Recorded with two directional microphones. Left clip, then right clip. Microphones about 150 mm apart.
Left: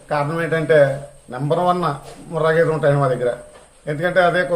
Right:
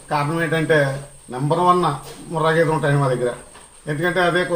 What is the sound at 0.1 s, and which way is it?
A man's voice, 20° left (ahead or behind).